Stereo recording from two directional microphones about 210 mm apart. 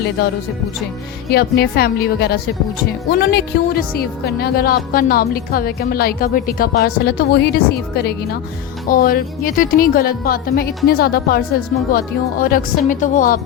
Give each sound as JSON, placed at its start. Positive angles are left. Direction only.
{"t": 1.3, "sound": "a woman's voice", "side_deg": 50}